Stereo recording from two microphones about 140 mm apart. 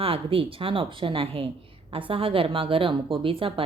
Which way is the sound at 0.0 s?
40° right (ahead or behind).